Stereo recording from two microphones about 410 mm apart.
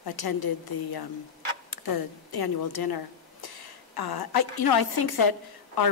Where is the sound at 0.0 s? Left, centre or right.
Left.